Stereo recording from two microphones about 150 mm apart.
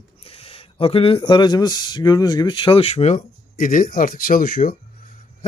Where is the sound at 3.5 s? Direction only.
65° left (ahead or behind).